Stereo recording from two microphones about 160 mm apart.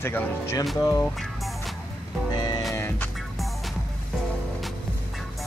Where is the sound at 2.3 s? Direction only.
25° left (ahead or behind).